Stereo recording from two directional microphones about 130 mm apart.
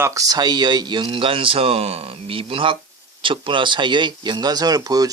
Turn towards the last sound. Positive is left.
turn(degrees=-30)  # may be behind; listen again after turning